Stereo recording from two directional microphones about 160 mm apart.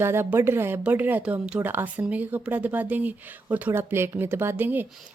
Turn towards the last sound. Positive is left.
turn(degrees=-10)  # may be behind; listen again after turning